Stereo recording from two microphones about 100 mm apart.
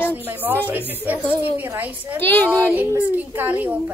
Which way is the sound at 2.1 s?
20° left (ahead or behind).